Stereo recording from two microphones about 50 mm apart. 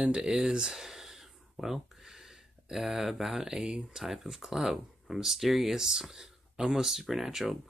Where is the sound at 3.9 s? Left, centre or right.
Centre.